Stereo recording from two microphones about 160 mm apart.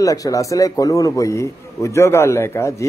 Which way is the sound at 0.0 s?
20° left (ahead or behind).